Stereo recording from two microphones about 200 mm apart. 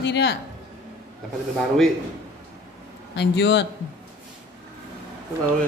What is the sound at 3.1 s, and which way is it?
Speech, 60° left (ahead or behind).